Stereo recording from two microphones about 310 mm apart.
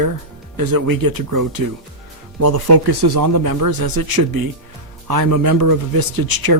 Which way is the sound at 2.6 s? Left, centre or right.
Right.